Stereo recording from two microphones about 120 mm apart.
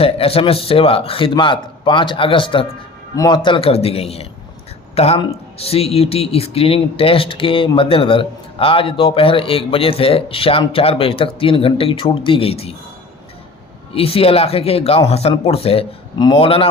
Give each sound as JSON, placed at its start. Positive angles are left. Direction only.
{"t": 0.0, "sound": "a man's voice", "side_deg": 50}
{"t": 3.7, "sound": "a man's voice", "side_deg": 55}
{"t": 13.9, "sound": "a man's voice", "side_deg": 50}
{"t": 16.1, "sound": "a man's voice", "side_deg": 35}
{"t": 16.4, "sound": "a man's voice", "side_deg": 50}